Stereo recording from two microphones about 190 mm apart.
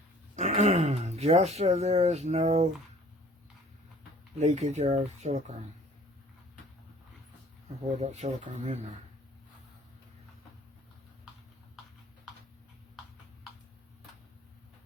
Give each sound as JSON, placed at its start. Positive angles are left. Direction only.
{"t": 0.3, "sound": "speech", "side_deg": -35}
{"t": 4.4, "sound": "speech", "side_deg": -35}
{"t": 7.9, "sound": "speech", "side_deg": -35}